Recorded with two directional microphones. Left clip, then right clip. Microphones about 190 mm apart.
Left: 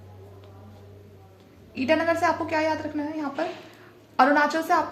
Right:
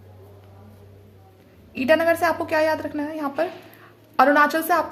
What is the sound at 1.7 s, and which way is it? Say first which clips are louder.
A woman's voice: right 4 dB; 55° right (ahead or behind).